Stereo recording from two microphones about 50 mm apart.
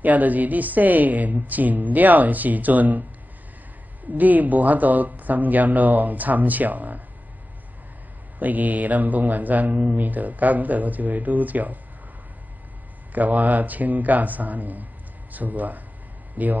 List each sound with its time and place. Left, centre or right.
0.0 s speech: right
4.2 s speech: right
8.4 s speech: right
13.1 s speech: right